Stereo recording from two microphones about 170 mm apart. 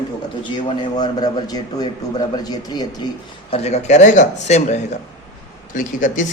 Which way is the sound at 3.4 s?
35° left (ahead or behind).